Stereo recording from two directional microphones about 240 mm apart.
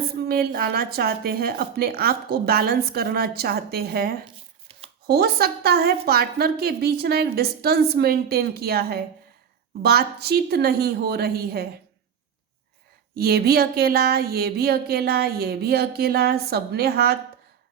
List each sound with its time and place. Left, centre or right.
0.2 s a woman's voice: right
4.7 s a sound: right
5.0 s a woman's voice: right
13.1 s a woman's voice: right